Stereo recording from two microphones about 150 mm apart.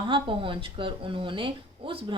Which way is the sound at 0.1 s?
35° right (ahead or behind).